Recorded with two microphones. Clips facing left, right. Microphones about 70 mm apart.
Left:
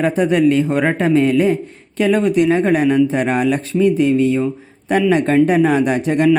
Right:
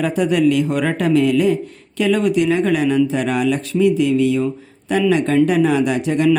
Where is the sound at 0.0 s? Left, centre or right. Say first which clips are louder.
Left 2 dB; left.